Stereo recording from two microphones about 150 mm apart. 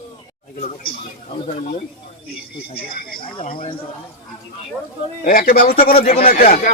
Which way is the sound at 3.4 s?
65° left (ahead or behind).